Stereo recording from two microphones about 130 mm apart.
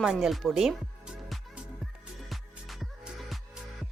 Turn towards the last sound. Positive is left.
turn(degrees=0)  # may be behind; listen again after turning